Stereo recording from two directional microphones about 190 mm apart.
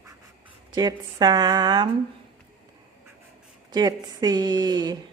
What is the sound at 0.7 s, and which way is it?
Speech, 20° right (ahead or behind).